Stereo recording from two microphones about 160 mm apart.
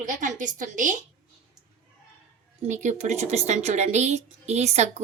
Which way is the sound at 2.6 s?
50° right (ahead or behind).